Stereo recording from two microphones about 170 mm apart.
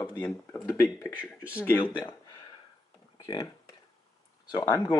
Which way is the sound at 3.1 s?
20° left (ahead or behind).